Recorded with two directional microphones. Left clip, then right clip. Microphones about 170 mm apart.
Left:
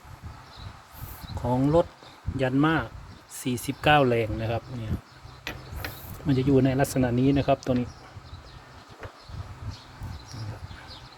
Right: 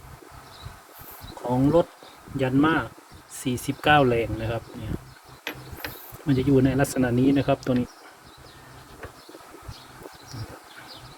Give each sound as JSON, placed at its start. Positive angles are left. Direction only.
{"t": 1.5, "sound": "speech", "side_deg": 20}
{"t": 6.2, "sound": "speech", "side_deg": 25}